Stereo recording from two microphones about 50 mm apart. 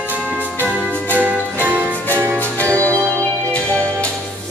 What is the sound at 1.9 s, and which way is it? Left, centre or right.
Music, left.